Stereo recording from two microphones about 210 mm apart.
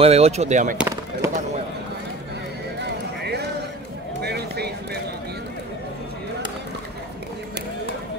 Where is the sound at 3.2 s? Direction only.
50° right (ahead or behind).